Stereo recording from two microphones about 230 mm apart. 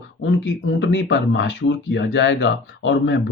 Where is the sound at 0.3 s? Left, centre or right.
Left.